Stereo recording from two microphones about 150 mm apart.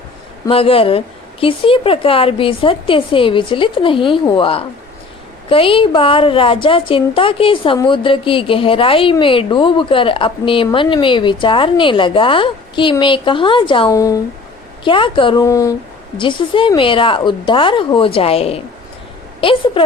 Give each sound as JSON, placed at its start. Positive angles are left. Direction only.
{"t": 0.4, "sound": "a woman's voice", "side_deg": 40}
{"t": 13.9, "sound": "speech", "side_deg": 20}
{"t": 14.8, "sound": "a woman's voice", "side_deg": 35}
{"t": 15.4, "sound": "speech", "side_deg": 20}
{"t": 16.1, "sound": "a woman's voice", "side_deg": 35}